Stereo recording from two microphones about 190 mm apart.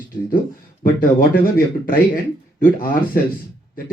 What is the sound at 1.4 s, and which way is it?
Speech, 50° left (ahead or behind).